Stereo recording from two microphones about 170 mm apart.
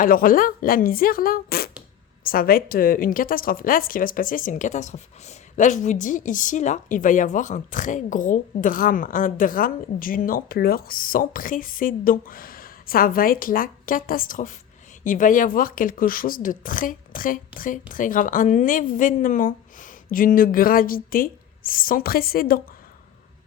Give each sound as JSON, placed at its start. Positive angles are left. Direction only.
{"t": 0.0, "sound": "a woman's voice", "side_deg": 55}